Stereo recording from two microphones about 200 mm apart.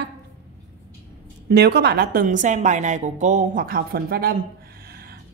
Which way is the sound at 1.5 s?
55° right (ahead or behind).